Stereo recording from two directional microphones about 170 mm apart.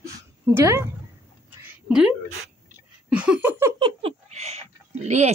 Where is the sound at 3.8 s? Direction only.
35° right (ahead or behind).